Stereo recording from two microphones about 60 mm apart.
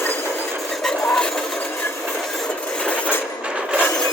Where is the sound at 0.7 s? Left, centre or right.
Centre.